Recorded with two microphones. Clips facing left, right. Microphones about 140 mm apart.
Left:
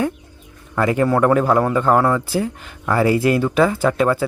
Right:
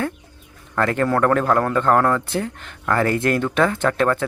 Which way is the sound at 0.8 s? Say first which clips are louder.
Left 2 dB; 10° left (ahead or behind).